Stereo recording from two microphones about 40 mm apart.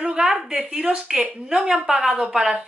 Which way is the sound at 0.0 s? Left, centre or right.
Right.